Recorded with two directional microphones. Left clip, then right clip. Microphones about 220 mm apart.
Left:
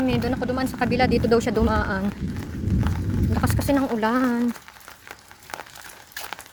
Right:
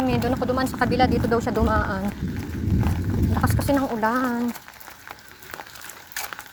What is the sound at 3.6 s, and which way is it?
Speech, 25° left (ahead or behind).